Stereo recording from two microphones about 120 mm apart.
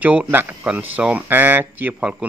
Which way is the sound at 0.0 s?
15° right (ahead or behind).